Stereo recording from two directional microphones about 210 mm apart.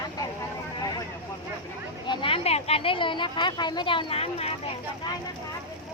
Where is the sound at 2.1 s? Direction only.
25° left (ahead or behind).